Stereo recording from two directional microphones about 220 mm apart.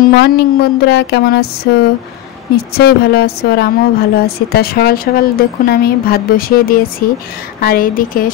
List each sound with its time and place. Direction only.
0.2 s a woman's voice: 50° left (ahead or behind)